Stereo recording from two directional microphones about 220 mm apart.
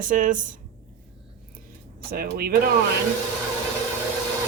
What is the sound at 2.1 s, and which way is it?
Speech, 45° right (ahead or behind).